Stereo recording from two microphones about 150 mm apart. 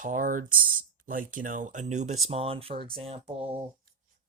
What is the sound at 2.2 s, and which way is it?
Speech, 40° right (ahead or behind).